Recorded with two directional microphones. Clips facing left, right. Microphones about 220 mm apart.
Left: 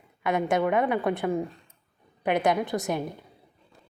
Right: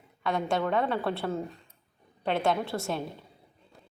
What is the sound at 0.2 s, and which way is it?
A woman's voice, 20° left (ahead or behind).